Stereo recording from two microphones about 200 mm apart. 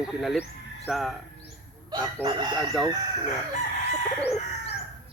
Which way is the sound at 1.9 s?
20° right (ahead or behind).